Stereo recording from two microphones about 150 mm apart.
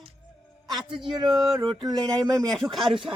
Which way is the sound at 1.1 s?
30° right (ahead or behind).